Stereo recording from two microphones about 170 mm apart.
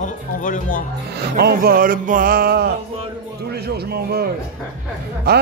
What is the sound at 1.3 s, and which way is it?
Music, 65° right (ahead or behind).